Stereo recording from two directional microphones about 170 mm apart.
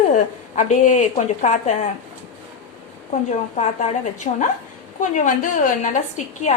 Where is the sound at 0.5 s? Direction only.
45° left (ahead or behind).